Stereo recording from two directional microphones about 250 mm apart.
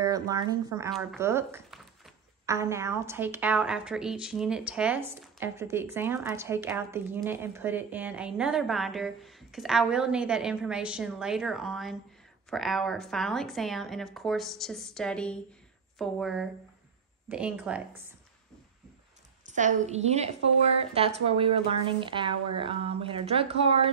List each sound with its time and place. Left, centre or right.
0.0 s a woman's voice: centre
19.5 s a woman's voice: right